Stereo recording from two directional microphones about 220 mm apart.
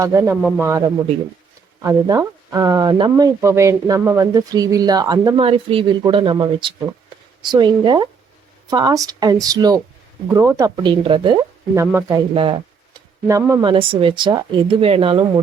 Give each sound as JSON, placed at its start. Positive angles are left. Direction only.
{"t": 0.0, "sound": "speech", "side_deg": -15}
{"t": 1.8, "sound": "speech", "side_deg": -15}